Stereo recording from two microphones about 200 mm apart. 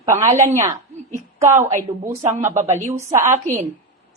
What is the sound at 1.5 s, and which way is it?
Speech, 35° right (ahead or behind).